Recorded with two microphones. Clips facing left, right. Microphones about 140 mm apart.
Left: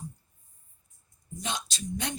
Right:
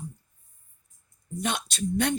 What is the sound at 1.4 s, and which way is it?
Speech, 60° right (ahead or behind).